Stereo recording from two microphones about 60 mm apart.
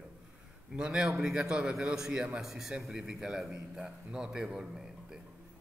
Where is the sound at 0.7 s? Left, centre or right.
Centre.